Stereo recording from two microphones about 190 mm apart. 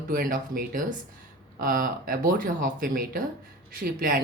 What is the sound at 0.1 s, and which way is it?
Speech, 45° right (ahead or behind).